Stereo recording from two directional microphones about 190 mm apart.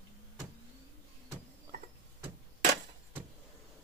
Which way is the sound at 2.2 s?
30° right (ahead or behind).